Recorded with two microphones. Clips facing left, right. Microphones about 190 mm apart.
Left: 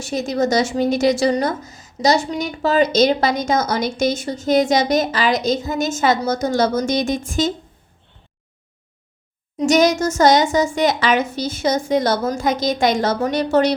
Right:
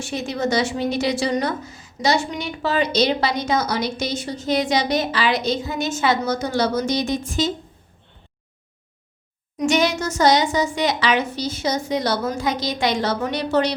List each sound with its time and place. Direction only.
0.0 s a woman's voice: 40° left (ahead or behind)
9.6 s a woman's voice: 40° left (ahead or behind)